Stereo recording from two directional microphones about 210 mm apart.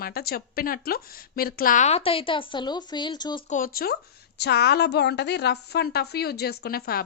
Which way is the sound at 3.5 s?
45° left (ahead or behind).